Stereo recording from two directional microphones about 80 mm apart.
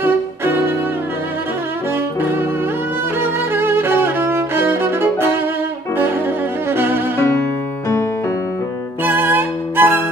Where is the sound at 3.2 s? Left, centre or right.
Right.